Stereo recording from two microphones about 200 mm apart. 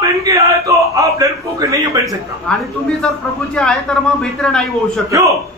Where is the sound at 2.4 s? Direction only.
5° left (ahead or behind).